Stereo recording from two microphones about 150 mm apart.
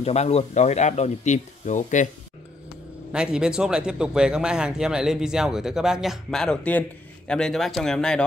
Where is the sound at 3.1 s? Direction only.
5° right (ahead or behind).